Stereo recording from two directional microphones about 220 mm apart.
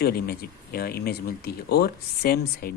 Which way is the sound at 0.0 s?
45° left (ahead or behind).